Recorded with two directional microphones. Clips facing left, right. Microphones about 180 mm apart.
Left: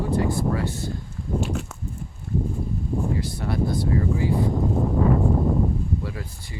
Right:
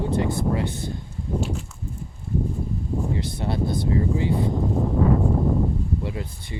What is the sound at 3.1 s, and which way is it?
Speech, 25° right (ahead or behind).